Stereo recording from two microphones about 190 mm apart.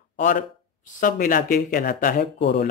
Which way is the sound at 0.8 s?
45° left (ahead or behind).